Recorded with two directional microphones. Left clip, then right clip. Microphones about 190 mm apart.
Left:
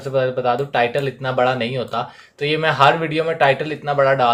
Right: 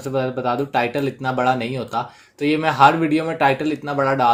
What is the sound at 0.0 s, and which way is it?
Speech, 40° right (ahead or behind).